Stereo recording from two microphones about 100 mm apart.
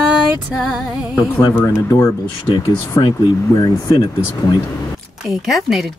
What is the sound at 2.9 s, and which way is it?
Speech, 40° left (ahead or behind).